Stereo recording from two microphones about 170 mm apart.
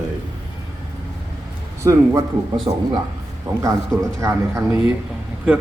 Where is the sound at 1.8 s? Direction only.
15° right (ahead or behind).